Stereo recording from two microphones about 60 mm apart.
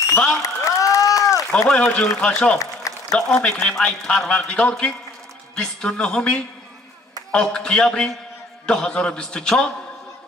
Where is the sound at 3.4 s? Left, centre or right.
Centre.